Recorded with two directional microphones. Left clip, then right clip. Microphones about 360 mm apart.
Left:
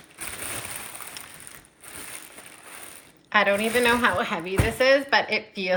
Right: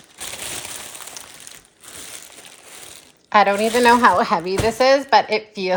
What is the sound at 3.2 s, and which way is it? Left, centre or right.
A woman's voice, centre.